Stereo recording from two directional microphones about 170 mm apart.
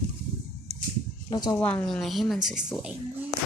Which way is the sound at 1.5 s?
10° left (ahead or behind).